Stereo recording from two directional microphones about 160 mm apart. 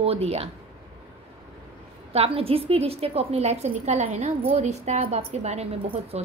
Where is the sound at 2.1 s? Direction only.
35° right (ahead or behind).